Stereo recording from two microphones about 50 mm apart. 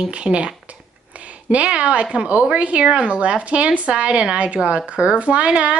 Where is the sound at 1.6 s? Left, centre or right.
Right.